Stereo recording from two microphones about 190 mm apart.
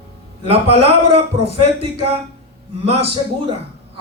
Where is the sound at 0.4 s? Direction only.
30° right (ahead or behind).